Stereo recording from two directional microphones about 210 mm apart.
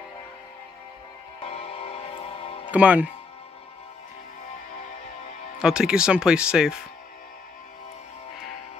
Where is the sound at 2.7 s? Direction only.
5° right (ahead or behind).